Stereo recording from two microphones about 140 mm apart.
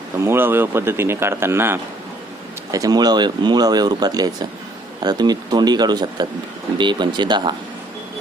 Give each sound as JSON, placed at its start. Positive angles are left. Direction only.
{"t": 0.3, "sound": "speech", "side_deg": -15}